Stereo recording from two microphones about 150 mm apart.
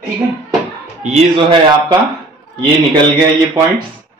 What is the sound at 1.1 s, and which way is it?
Speech, 35° right (ahead or behind).